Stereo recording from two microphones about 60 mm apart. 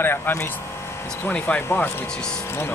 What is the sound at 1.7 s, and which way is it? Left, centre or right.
Speech, left.